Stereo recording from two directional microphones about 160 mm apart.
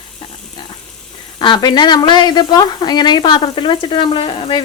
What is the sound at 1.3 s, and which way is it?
Speech, 30° left (ahead or behind).